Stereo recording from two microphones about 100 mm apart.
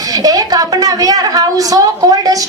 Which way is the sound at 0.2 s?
40° right (ahead or behind).